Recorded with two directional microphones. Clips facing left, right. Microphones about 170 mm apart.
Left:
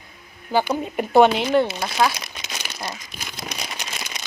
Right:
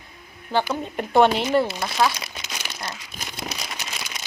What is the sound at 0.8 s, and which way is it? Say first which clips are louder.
A woman's voice: left 3 dB; 5° left (ahead or behind).